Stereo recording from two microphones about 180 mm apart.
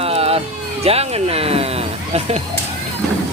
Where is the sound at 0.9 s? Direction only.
35° right (ahead or behind).